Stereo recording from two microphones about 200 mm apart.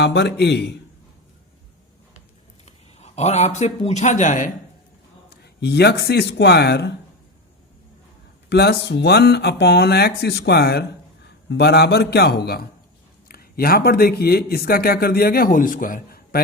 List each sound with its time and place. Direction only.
0.0 s speech: 60° left (ahead or behind)
2.6 s speech: 35° left (ahead or behind)
5.3 s speech: 55° left (ahead or behind)
8.4 s speech: 55° left (ahead or behind)